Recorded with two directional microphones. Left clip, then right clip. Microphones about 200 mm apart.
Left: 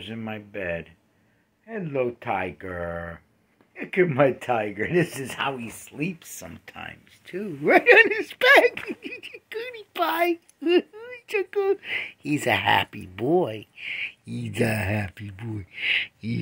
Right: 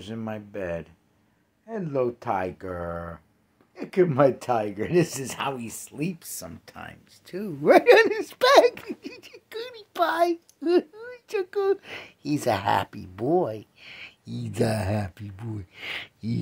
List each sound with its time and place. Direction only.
0.0 s speech: 5° right (ahead or behind)
2.5 s speech: 5° left (ahead or behind)
13.6 s speech: 45° right (ahead or behind)
14.0 s speech: centre (ahead or behind)
15.8 s speech: 10° right (ahead or behind)